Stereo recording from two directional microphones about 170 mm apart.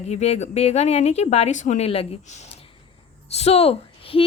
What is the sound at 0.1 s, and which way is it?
A woman's voice, 40° left (ahead or behind).